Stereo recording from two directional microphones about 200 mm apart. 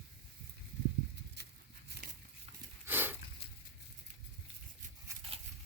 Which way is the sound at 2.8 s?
10° right (ahead or behind).